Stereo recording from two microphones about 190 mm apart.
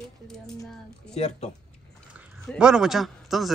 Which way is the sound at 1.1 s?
35° left (ahead or behind).